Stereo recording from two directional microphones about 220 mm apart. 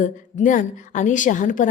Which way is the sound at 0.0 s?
35° left (ahead or behind).